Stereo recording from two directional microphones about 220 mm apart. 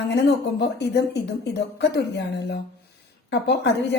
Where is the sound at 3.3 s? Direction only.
50° left (ahead or behind).